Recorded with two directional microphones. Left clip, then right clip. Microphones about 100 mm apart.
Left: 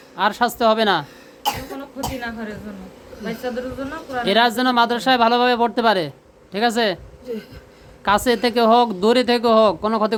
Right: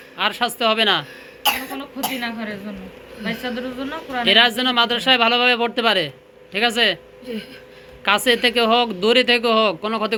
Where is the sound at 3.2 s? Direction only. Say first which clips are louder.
Even; 35° left (ahead or behind).